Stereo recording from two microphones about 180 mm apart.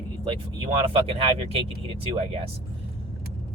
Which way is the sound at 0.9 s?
30° right (ahead or behind).